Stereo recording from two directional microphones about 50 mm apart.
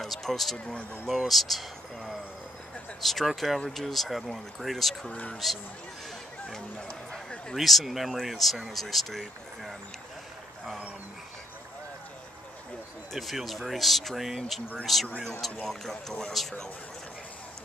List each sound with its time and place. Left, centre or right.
0.0 s a sound: centre
1.0 s speech: centre
5.1 s speech: left
6.9 s a sound: centre
7.5 s speech: centre
13.1 s speech: centre